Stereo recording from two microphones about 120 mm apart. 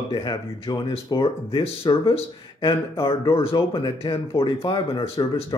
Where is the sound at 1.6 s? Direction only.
50° left (ahead or behind).